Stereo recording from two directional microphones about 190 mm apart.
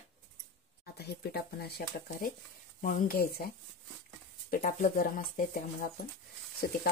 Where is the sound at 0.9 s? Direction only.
55° left (ahead or behind).